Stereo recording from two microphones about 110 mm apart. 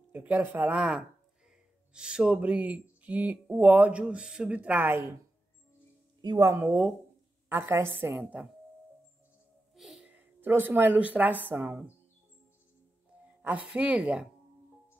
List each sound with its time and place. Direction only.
0.1 s speech: 15° right (ahead or behind)
6.2 s speech: 40° right (ahead or behind)
6.5 s a woman's voice: 20° right (ahead or behind)
9.8 s a sound: 5° right (ahead or behind)
10.1 s speech: 20° right (ahead or behind)
13.4 s speech: 15° right (ahead or behind)